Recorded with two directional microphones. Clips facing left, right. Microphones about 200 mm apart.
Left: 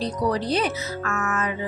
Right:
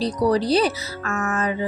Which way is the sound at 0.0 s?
35° right (ahead or behind).